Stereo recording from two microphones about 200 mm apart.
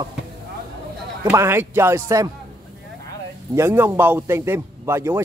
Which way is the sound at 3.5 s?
10° right (ahead or behind).